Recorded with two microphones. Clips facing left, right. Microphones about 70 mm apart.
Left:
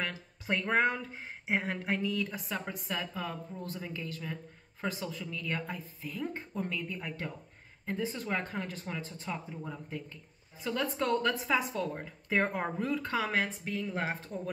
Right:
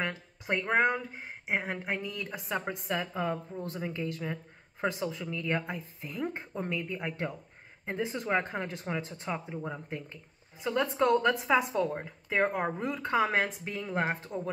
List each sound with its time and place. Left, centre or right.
0.5 s a woman's voice: centre
2.6 s speech: right
12.3 s a woman's voice: centre; by 14.5 s right